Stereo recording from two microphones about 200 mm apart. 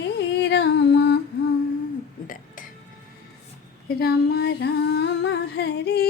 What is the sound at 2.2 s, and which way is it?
Burping, 45° left (ahead or behind).